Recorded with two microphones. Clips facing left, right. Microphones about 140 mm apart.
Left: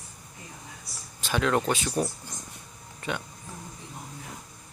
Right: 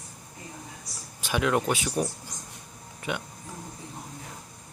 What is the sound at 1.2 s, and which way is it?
Speech, 10° right (ahead or behind).